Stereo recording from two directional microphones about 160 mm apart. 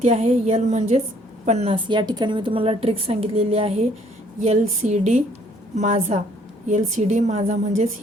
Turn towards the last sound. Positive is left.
turn(degrees=-45)  # may be behind; listen again after turning